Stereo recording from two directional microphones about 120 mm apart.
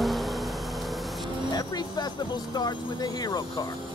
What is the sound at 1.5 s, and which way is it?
Vehicle, 35° left (ahead or behind).